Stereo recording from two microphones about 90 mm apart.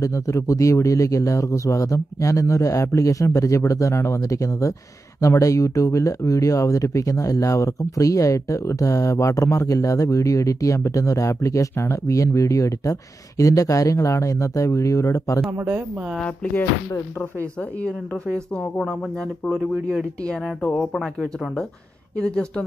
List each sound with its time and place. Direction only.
0.0 s speech: 35° left (ahead or behind)
15.5 s speech: 25° right (ahead or behind)
16.2 s speech: 15° left (ahead or behind)
20.8 s speech: centre (ahead or behind)